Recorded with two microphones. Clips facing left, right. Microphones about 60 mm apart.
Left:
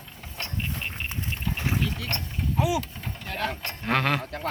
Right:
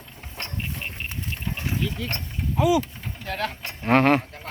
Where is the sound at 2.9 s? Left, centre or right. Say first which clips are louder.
Even; centre.